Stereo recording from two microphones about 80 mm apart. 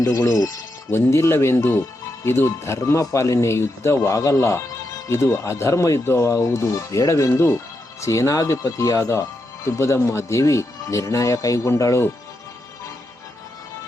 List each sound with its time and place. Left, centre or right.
0.0 s speech: left